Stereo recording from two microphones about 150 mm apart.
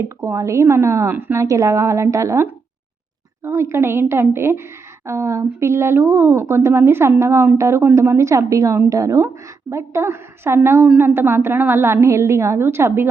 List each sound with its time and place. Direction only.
0.0 s a woman's voice: 20° right (ahead or behind)